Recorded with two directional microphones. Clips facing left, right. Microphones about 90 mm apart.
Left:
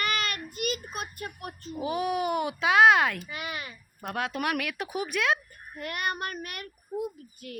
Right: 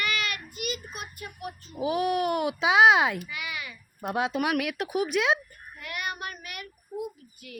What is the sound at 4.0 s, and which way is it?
Speech, 20° right (ahead or behind).